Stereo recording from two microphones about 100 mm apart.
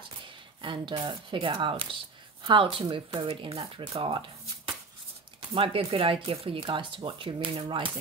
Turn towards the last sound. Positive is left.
turn(degrees=-60)  # may be behind; listen again after turning